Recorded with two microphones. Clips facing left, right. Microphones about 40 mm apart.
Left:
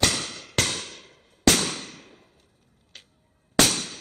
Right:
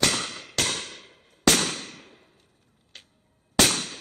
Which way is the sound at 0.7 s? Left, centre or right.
Centre.